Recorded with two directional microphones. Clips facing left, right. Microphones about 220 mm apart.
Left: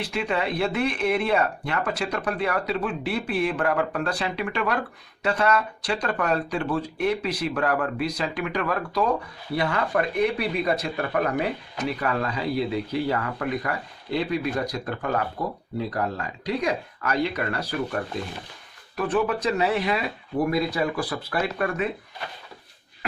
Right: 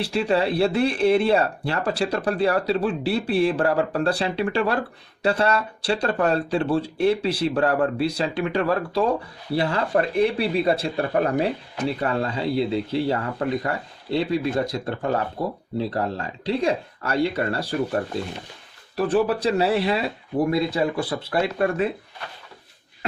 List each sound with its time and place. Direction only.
0.0 s speech: 30° right (ahead or behind)